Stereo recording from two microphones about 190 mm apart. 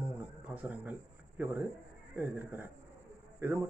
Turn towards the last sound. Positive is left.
turn(degrees=-15)  # may be behind; listen again after turning